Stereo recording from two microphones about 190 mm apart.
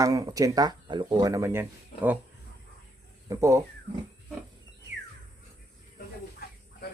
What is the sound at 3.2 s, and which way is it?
Speech, 15° right (ahead or behind).